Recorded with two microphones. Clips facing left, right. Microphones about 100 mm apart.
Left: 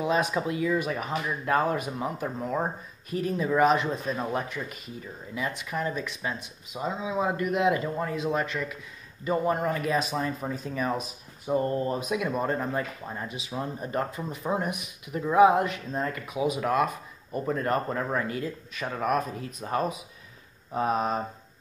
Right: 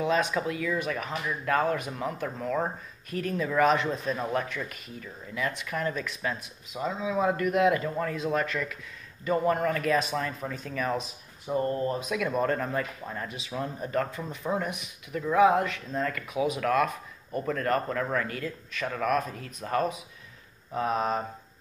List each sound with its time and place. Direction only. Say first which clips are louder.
0.0 s speech: even; 10° left (ahead or behind)
0.3 s speech: left 2 dB; 20° left (ahead or behind)
3.6 s a man's voice: even; 5° left (ahead or behind)
4.3 s speech: right 1 dB; 15° left (ahead or behind)
8.0 s speech: even; 15° left (ahead or behind)
16.5 s speech: even; 10° left (ahead or behind)